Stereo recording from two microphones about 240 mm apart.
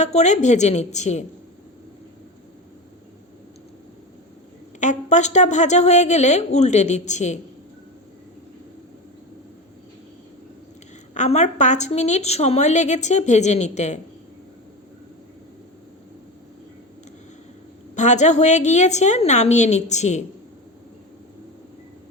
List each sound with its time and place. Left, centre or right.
0.0 s a woman's voice: left
4.8 s a woman's voice: left
11.1 s a woman's voice: left
17.9 s a woman's voice: left